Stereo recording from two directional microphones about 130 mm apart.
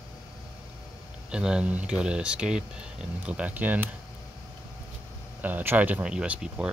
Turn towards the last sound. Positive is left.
turn(degrees=-10)  # may be behind; listen again after turning